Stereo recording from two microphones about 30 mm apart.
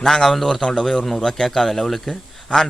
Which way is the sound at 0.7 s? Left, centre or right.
Centre.